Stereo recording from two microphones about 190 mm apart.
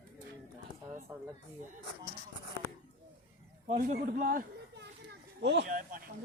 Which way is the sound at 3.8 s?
45° right (ahead or behind).